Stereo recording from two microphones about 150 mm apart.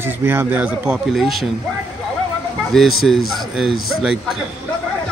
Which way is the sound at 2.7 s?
Centre (ahead or behind).